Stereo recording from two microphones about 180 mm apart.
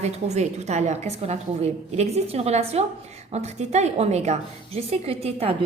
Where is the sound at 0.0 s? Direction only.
40° right (ahead or behind).